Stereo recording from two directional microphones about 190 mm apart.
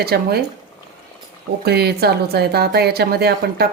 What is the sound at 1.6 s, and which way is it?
A woman's voice, 55° right (ahead or behind).